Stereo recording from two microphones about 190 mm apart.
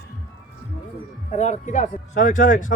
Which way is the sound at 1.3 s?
40° left (ahead or behind).